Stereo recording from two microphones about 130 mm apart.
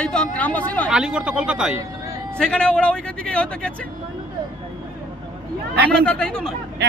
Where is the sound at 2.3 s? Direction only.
5° left (ahead or behind).